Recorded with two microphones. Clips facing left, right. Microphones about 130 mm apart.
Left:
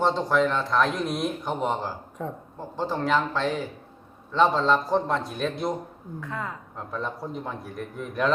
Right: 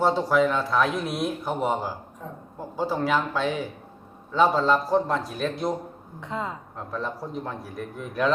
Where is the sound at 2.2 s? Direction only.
90° left.